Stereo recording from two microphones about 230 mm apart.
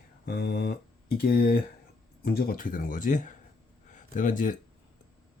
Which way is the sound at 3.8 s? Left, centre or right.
Left.